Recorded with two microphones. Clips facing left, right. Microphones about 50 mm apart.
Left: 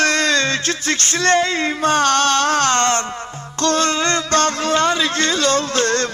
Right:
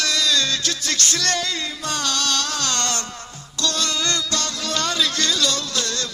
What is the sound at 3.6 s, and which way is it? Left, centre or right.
Music, left.